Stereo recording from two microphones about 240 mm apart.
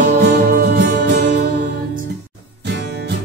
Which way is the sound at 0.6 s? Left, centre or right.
Right.